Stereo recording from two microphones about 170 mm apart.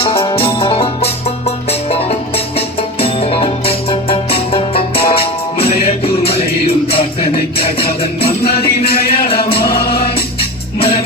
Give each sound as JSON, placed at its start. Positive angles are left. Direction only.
{"t": 0.0, "sound": "music", "side_deg": 35}
{"t": 8.4, "sound": "music", "side_deg": 65}